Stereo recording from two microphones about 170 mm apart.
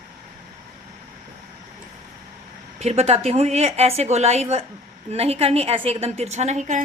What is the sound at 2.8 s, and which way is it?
A woman's voice, 40° right (ahead or behind).